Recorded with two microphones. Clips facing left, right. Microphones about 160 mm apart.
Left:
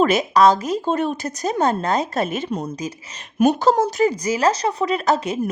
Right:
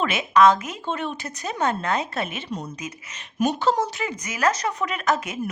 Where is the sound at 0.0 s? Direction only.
40° left (ahead or behind).